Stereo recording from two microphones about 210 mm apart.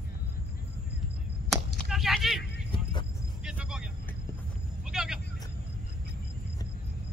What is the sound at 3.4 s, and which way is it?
Vehicle, 5° right (ahead or behind).